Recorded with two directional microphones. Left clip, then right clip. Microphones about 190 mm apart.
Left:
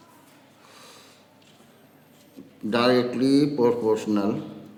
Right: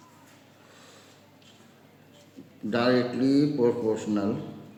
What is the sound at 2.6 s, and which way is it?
A man's voice, 55° left (ahead or behind).